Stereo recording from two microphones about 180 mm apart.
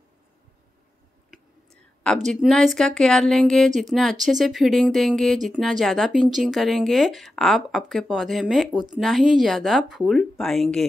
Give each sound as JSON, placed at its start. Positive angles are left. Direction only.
{"t": 2.0, "sound": "speech", "side_deg": 0}